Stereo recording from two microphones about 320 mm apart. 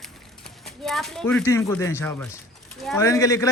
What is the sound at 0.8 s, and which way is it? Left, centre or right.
A man's voice, centre.